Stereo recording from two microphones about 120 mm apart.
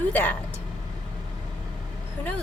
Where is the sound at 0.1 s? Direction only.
15° left (ahead or behind).